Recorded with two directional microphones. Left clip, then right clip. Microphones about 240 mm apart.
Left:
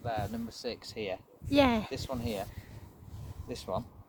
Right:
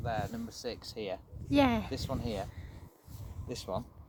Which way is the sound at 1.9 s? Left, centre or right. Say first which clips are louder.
Left 1 dB; right.